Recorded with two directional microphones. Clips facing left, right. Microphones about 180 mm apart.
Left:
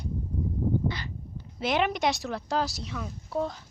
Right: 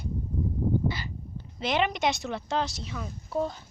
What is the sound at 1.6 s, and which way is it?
Speech, centre (ahead or behind).